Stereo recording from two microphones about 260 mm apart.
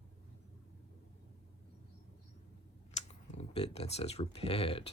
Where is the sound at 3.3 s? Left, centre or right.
Left.